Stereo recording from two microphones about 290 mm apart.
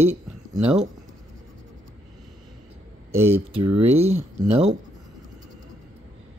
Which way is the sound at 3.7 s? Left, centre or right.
Right.